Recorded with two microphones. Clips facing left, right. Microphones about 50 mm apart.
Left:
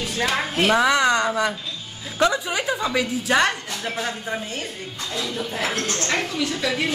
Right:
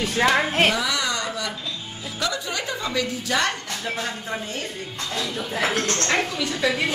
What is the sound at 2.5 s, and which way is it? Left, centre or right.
A woman's voice, centre.